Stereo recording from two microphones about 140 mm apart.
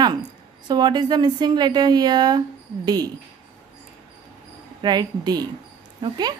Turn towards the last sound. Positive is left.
turn(degrees=-30)  # may be behind; listen again after turning